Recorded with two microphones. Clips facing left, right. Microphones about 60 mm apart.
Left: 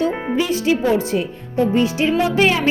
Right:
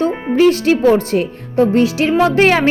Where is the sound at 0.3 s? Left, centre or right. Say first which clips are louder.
Right 9 dB; right.